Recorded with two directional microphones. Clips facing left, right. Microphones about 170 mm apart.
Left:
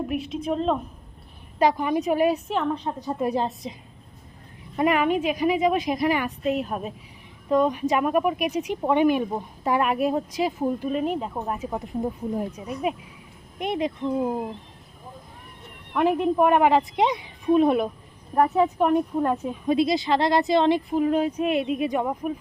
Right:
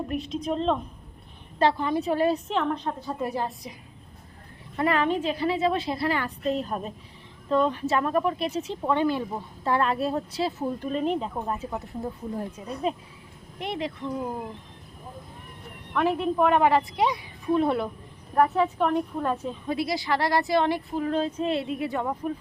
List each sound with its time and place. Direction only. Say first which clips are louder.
0.1 s a woman's voice: left 2 dB; 5° left (ahead or behind)
3.1 s a woman's voice: left 6 dB; 20° left (ahead or behind)
4.8 s a woman's voice: left 3 dB; 15° left (ahead or behind)
16.0 s speech: left 3 dB; 15° left (ahead or behind)